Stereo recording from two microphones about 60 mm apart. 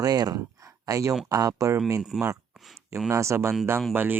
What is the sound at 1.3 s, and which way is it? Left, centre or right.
Speech, right.